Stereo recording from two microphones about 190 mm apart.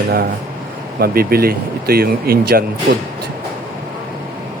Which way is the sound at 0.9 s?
50° right (ahead or behind).